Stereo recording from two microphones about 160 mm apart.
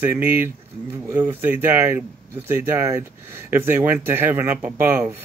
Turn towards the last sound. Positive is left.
turn(degrees=-15)  # may be behind; listen again after turning